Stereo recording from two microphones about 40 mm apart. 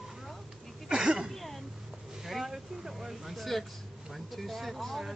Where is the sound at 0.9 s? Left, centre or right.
Centre.